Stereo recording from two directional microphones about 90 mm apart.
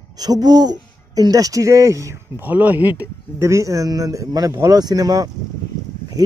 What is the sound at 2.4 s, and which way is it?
Speech, 20° right (ahead or behind).